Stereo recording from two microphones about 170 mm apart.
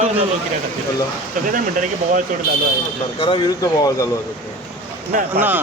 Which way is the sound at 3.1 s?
30° left (ahead or behind).